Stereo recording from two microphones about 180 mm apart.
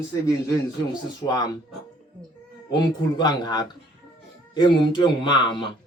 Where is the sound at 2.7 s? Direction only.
25° left (ahead or behind).